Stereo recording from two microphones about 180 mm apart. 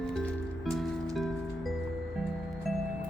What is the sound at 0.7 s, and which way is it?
Music, centre (ahead or behind).